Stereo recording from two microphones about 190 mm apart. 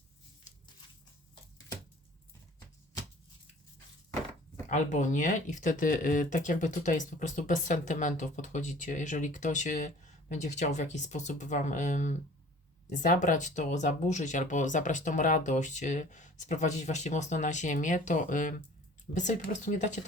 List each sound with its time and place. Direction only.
4.7 s speech: 40° left (ahead or behind)